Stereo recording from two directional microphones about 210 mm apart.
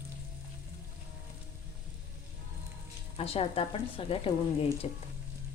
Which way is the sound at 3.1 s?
30° left (ahead or behind).